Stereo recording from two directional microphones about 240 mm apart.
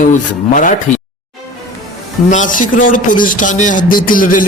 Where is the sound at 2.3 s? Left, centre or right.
Left.